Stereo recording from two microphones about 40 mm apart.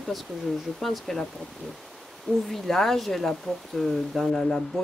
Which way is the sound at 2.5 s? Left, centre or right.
Centre.